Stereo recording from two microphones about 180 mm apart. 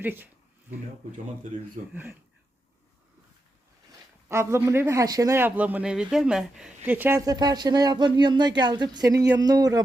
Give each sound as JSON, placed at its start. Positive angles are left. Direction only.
{"t": 0.0, "sound": "a man's voice", "side_deg": -10}
{"t": 1.9, "sound": "a man's voice", "side_deg": -10}
{"t": 4.3, "sound": "a man's voice", "side_deg": -15}